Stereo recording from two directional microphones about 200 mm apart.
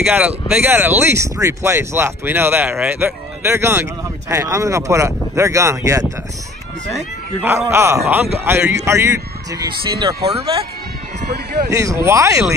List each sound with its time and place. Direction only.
0.0 s speech: 5° right (ahead or behind)
7.4 s speech: 15° right (ahead or behind)
11.7 s speech: 15° right (ahead or behind)